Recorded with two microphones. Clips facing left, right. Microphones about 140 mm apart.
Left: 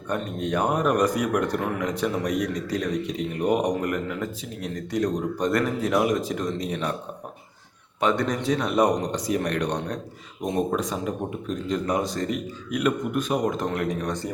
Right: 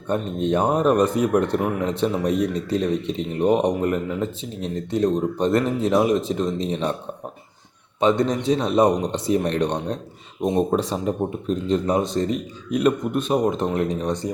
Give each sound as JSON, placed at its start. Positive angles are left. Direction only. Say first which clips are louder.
{"t": 0.1, "sound": "speech", "louder": "right 5 dB", "side_deg": -25}
{"t": 8.0, "sound": "speech", "louder": "right 4 dB", "side_deg": -20}